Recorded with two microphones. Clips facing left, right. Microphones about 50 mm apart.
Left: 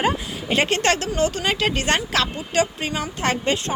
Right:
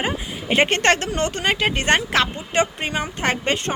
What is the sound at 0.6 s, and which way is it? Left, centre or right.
Speech, right.